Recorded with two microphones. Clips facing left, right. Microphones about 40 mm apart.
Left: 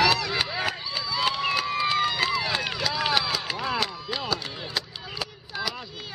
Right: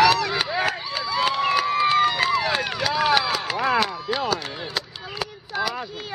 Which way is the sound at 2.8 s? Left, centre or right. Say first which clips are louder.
Right 6 dB; right.